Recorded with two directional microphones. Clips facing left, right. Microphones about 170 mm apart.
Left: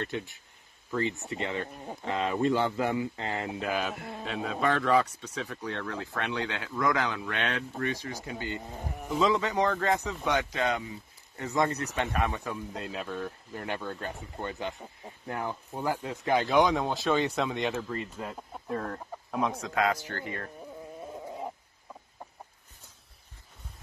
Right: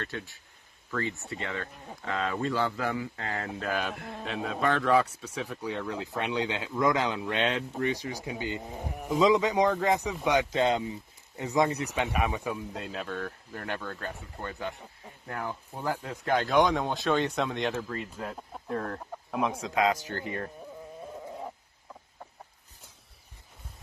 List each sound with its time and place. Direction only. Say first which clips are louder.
0.0 s speech: left 3 dB; 20° left (ahead or behind); by 10.5 s 15° right (ahead or behind)
10.5 s speech: right 4 dB; 25° right (ahead or behind); by 13.1 s centre (ahead or behind)
13.1 s speech: even; 10° left (ahead or behind); by 20.5 s 20° right (ahead or behind)